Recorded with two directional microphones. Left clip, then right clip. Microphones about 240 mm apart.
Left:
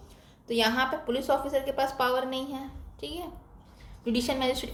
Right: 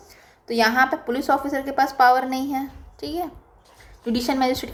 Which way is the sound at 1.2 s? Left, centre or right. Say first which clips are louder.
Right 5 dB; right.